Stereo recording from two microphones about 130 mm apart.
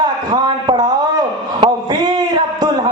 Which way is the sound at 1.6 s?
35° right (ahead or behind).